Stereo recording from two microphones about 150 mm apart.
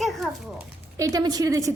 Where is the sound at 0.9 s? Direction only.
25° right (ahead or behind).